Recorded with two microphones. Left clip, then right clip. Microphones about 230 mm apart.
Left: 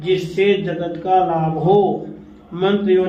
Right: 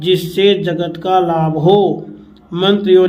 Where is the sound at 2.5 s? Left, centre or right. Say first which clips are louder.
Right 5 dB; right.